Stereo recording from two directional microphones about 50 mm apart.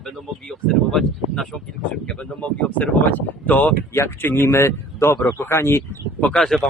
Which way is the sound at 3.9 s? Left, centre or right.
Left.